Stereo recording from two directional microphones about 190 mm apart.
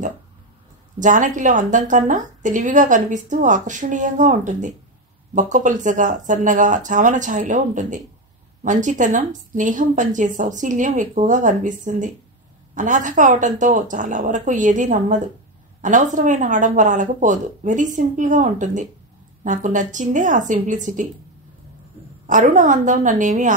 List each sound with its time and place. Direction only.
0.9 s a woman's voice: 40° right (ahead or behind)
22.2 s a woman's voice: 40° right (ahead or behind)